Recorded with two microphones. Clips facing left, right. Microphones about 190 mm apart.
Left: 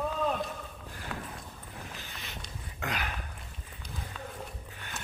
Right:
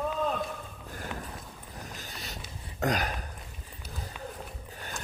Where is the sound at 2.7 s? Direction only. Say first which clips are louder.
Right 7 dB; 40° right (ahead or behind).